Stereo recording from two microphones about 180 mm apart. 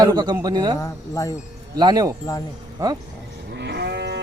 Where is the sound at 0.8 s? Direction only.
20° left (ahead or behind).